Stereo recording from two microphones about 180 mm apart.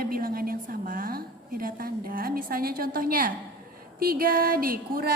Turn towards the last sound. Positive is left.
turn(degrees=-55)  # may be behind; listen again after turning